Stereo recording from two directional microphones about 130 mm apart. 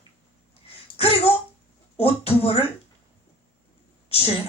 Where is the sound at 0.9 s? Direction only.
50° left (ahead or behind).